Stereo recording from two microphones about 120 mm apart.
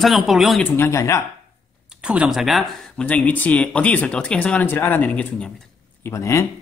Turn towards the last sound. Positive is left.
turn(degrees=25)  # may be behind; listen again after turning